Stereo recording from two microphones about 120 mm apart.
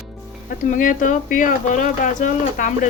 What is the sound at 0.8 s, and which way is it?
Speech, 90° left.